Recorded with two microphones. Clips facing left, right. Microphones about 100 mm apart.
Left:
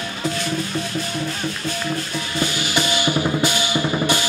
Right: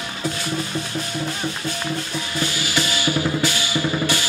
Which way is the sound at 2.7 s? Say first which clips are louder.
Left 2 dB; 20° left (ahead or behind).